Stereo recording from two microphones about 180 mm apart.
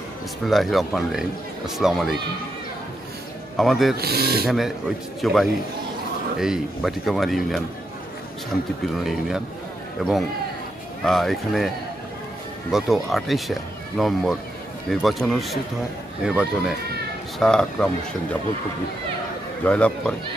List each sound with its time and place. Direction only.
0.5 s speech: centre (ahead or behind)
3.5 s speech: centre (ahead or behind)
3.9 s speech: 60° right (ahead or behind)
4.5 s speech: centre (ahead or behind)
10.0 s speech: centre (ahead or behind)
12.7 s speech: centre (ahead or behind)
19.6 s a man's voice: 5° left (ahead or behind)